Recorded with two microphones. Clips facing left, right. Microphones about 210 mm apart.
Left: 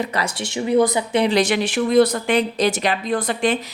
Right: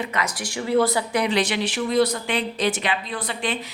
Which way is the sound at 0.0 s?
35° left (ahead or behind).